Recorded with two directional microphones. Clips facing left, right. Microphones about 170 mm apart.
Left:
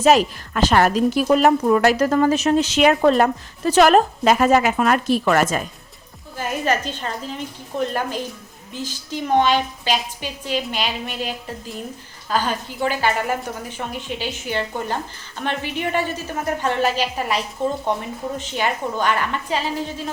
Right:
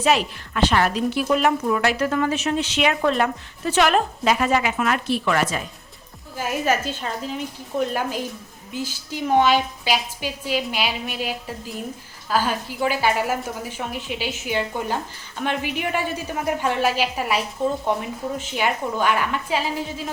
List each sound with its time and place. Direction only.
0.0 s a woman's voice: 40° left (ahead or behind)
6.3 s a woman's voice: 5° right (ahead or behind)